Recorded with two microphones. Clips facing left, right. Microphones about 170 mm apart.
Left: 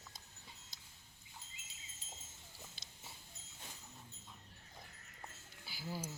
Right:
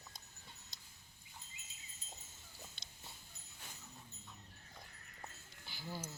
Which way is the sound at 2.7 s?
Centre (ahead or behind).